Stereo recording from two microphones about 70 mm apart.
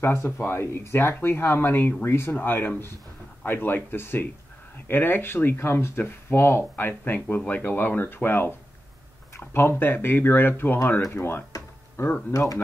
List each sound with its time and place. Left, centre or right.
0.0 s speech: left
12.3 s speech: left